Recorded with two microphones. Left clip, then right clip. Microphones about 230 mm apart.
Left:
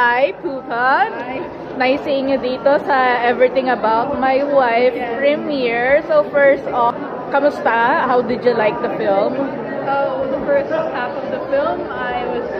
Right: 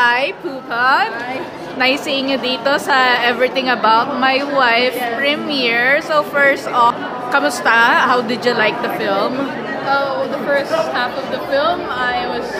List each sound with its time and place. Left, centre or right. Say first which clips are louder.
0.0 s a sound: even; centre
0.7 s a woman's voice: right 1 dB; centre
11.5 s a woman's voice: right 3 dB; right